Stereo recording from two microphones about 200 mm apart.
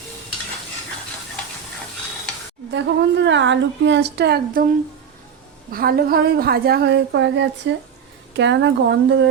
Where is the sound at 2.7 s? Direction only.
65° right (ahead or behind).